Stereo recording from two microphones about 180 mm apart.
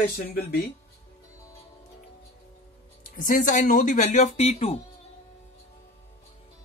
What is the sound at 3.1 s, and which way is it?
Speech, 50° left (ahead or behind).